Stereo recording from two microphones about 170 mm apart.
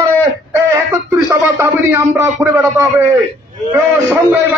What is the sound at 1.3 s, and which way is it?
A man's voice, 15° right (ahead or behind).